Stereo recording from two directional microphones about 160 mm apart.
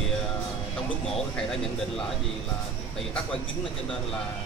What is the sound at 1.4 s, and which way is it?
Speech, 5° left (ahead or behind).